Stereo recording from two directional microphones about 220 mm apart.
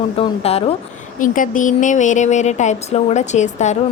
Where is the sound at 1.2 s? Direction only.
35° left (ahead or behind).